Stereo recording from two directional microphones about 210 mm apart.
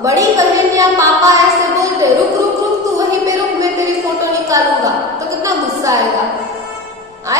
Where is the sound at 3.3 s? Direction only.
15° right (ahead or behind).